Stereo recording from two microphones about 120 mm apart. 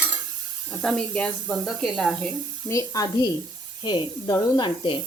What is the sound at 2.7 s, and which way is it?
Speech, 30° left (ahead or behind).